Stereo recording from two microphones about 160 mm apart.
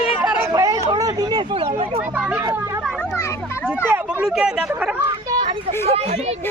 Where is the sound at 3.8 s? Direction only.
15° right (ahead or behind).